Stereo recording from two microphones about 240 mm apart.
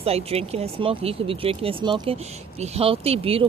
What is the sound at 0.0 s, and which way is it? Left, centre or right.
Speech, right.